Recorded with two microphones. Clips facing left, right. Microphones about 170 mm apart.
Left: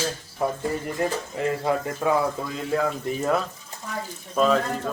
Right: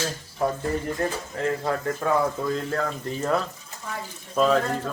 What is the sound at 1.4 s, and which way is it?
A man's voice, 10° left (ahead or behind).